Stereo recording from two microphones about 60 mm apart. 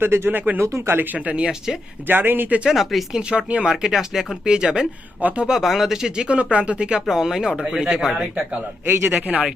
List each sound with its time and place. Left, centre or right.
0.0 s speech: right
0.6 s speech: right
1.1 s speech: right
1.5 s speech: centre
2.0 s speech: right
2.6 s speech: centre
7.1 s speech: centre
9.0 s speech: right